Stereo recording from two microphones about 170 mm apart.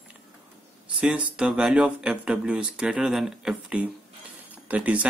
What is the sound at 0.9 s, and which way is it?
Speech, 5° right (ahead or behind).